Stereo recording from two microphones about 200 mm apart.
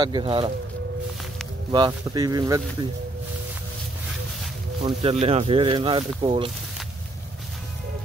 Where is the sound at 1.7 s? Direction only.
20° right (ahead or behind).